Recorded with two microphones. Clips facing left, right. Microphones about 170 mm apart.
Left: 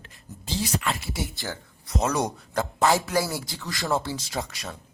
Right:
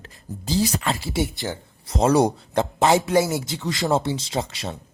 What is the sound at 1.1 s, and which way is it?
Speech, 25° right (ahead or behind).